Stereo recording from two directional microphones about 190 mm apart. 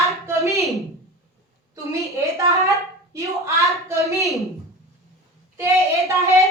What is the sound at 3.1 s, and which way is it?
Child singing, 15° right (ahead or behind).